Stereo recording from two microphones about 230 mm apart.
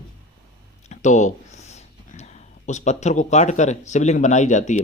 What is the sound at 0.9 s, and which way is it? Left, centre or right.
Speech, left.